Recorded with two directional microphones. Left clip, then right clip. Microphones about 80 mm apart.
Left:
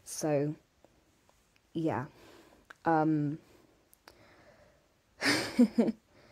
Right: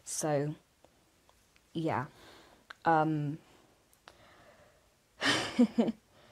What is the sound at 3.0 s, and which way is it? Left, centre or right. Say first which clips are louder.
Speech: left 4 dB; centre.